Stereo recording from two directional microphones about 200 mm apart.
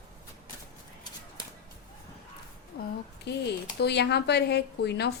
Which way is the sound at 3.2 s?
60° left (ahead or behind).